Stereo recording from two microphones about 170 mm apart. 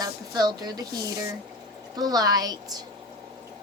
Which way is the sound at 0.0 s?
25° right (ahead or behind).